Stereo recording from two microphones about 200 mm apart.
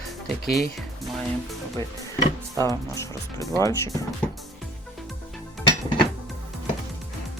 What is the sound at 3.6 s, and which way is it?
Speech, 15° left (ahead or behind).